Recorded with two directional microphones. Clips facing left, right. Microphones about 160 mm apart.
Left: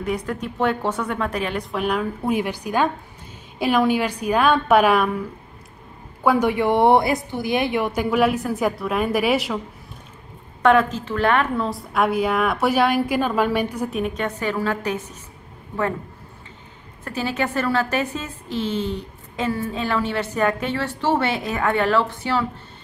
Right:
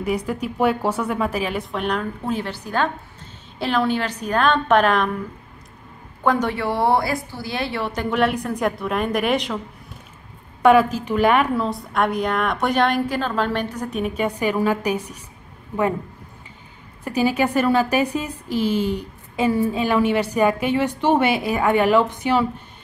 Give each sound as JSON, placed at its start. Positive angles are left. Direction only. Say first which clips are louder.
{"t": 0.0, "sound": "a woman's voice", "louder": "right 2 dB", "side_deg": -10}
{"t": 6.2, "sound": "a woman's voice", "louder": "left 2 dB", "side_deg": 10}
{"t": 10.6, "sound": "a woman's voice", "louder": "right 2 dB", "side_deg": -10}
{"t": 11.6, "sound": "a woman's voice", "louder": "even", "side_deg": 0}
{"t": 17.0, "sound": "a woman's voice", "louder": "right 5 dB", "side_deg": -10}